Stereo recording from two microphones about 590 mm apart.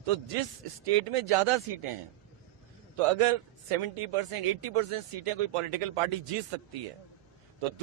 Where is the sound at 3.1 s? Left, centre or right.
Right.